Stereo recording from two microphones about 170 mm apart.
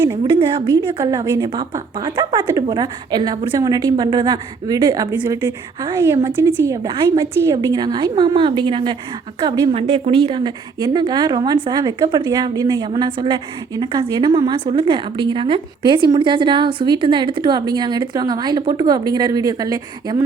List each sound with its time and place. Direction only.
0.3 s a woman's voice: 30° right (ahead or behind)
1.1 s a woman's voice: 20° right (ahead or behind)
12.9 s a woman's voice: 30° right (ahead or behind)